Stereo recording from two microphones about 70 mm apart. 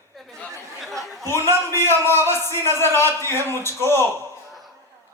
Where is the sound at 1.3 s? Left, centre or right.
Left.